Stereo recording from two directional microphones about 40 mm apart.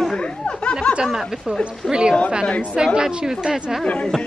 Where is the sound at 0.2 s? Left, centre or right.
Left.